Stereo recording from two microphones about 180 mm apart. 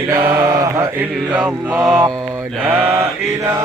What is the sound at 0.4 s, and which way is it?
Mantra, 15° right (ahead or behind).